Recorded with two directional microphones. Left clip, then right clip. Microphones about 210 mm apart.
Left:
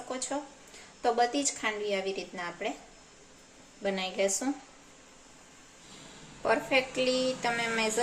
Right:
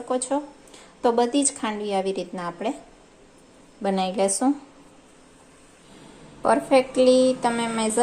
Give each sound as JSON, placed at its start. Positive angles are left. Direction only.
{"t": 1.0, "sound": "a woman's voice", "side_deg": -35}
{"t": 3.8, "sound": "a woman's voice", "side_deg": -30}
{"t": 6.4, "sound": "a woman's voice", "side_deg": -30}